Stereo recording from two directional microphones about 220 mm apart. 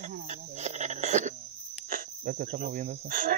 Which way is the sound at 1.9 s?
40° right (ahead or behind).